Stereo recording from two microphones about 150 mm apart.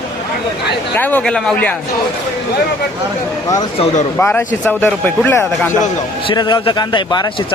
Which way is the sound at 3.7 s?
45° left (ahead or behind).